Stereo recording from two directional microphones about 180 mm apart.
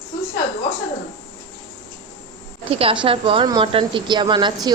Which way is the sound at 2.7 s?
30° right (ahead or behind).